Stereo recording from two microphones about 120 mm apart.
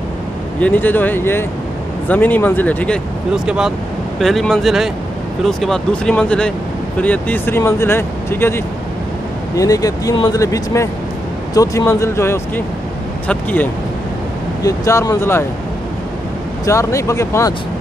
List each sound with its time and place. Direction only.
0.6 s speech: 15° left (ahead or behind)
3.4 s speech: 5° right (ahead or behind); by 8.6 s 20° left (ahead or behind)
9.6 s speech: 30° left (ahead or behind); by 13.7 s 15° left (ahead or behind)
14.6 s speech: 25° left (ahead or behind)
16.6 s speech: 25° left (ahead or behind)